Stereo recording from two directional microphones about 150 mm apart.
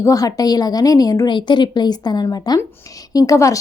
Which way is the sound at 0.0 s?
25° left (ahead or behind).